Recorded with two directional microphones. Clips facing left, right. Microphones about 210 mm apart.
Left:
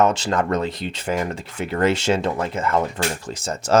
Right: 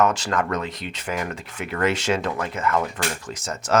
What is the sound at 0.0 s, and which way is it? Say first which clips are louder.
Speech: left 2 dB; 25° left (ahead or behind).